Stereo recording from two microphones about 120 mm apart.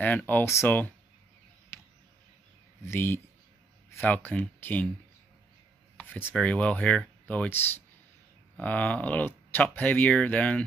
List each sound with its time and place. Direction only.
0.0 s speech: 15° left (ahead or behind)
2.9 s speech: 20° left (ahead or behind)
5.9 s speech: 15° left (ahead or behind)